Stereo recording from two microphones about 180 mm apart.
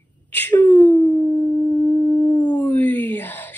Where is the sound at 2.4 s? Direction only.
10° left (ahead or behind).